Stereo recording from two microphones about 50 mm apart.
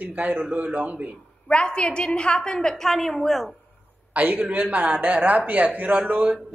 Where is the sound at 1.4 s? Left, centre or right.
Centre.